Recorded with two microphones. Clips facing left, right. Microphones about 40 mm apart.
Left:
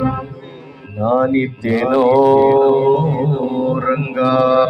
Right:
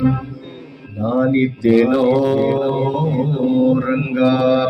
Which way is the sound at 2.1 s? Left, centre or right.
Left.